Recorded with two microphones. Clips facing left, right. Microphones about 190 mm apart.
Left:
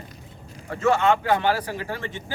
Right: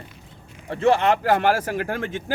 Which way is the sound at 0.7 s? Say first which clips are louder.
Right 3 dB; 30° right (ahead or behind).